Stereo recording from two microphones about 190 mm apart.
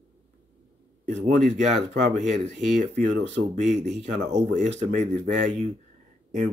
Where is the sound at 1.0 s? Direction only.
45° right (ahead or behind).